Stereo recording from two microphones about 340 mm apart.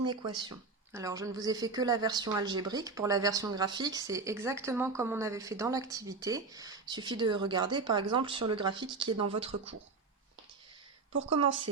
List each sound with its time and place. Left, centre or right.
0.0 s a woman's voice: centre